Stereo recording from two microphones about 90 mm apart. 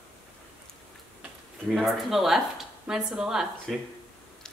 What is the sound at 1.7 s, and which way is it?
Speech, centre (ahead or behind).